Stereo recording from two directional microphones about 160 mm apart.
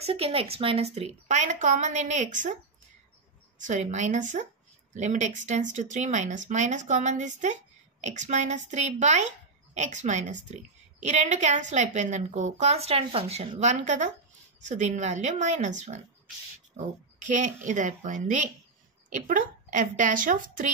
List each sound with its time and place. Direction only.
0.0 s speech: 35° right (ahead or behind)
3.5 s a woman's voice: 50° right (ahead or behind)